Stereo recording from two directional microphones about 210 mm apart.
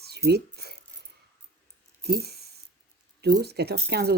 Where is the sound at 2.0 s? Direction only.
50° right (ahead or behind).